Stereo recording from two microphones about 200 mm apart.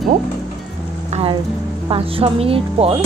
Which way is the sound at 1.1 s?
30° right (ahead or behind).